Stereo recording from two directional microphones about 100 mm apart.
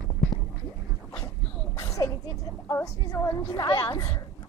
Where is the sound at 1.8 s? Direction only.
35° left (ahead or behind).